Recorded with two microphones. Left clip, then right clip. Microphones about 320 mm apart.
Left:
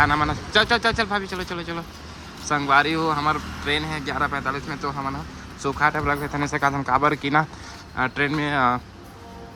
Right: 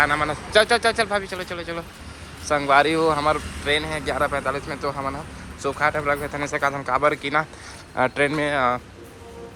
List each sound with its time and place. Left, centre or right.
0.0 s speech: centre
7.2 s speech: centre